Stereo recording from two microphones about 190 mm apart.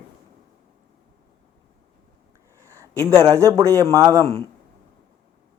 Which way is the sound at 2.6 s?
15° right (ahead or behind).